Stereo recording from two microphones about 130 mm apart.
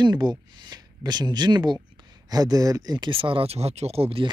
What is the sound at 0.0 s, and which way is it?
Speech, 35° right (ahead or behind).